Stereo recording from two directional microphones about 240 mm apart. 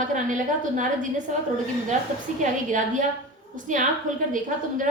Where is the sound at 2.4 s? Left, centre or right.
Right.